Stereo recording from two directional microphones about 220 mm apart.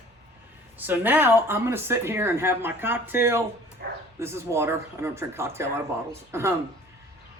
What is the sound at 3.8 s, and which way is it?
Bow-wow, 50° right (ahead or behind).